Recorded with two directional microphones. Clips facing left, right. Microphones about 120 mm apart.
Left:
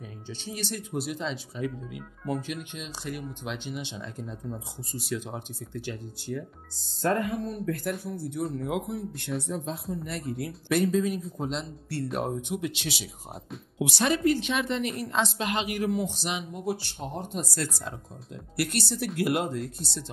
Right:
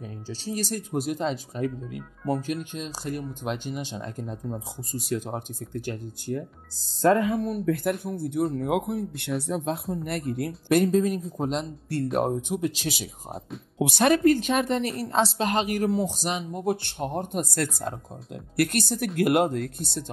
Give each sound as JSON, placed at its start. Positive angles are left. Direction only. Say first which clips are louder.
{"t": 0.3, "sound": "a woman's voice", "louder": "right 5 dB", "side_deg": -35}
{"t": 7.0, "sound": "speech", "louder": "right 6 dB", "side_deg": -85}
{"t": 8.0, "sound": "speech", "louder": "right 5 dB", "side_deg": -55}
{"t": 9.5, "sound": "speech", "louder": "right 4 dB", "side_deg": -80}
{"t": 10.0, "sound": "a woman's voice", "louder": "right 4 dB", "side_deg": -55}
{"t": 16.6, "sound": "speech", "louder": "right 6 dB", "side_deg": -55}